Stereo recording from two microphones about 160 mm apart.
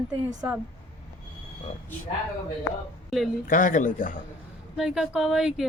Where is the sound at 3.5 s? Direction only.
55° left (ahead or behind).